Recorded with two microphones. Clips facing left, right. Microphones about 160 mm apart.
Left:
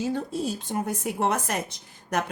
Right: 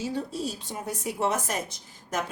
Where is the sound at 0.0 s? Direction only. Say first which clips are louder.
Left 3 dB; 55° left (ahead or behind).